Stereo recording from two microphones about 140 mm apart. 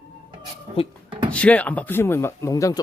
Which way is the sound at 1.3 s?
10° left (ahead or behind).